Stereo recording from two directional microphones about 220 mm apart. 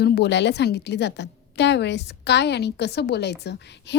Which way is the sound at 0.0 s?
50° left (ahead or behind).